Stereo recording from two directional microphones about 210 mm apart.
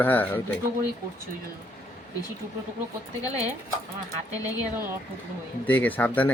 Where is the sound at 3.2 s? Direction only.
15° left (ahead or behind).